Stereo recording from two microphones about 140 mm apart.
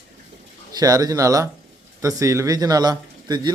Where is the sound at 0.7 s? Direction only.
25° right (ahead or behind).